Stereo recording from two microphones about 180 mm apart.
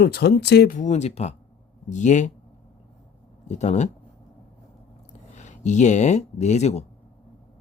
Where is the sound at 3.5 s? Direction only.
40° left (ahead or behind).